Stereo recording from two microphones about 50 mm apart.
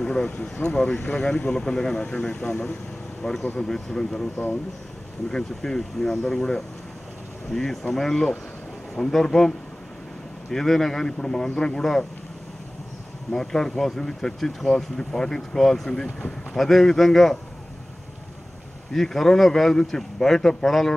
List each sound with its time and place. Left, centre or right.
0.0 s speech: centre
0.9 s speech: left
1.2 s speech: centre
2.0 s speech: left
5.3 s speech: centre
10.5 s speech: centre
13.3 s a man's voice: centre
18.9 s speech: centre